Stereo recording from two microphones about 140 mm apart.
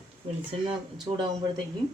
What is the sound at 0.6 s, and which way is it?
Speech, 35° right (ahead or behind).